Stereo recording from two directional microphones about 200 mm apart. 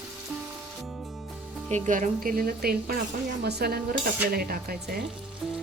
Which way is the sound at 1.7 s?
40° right (ahead or behind).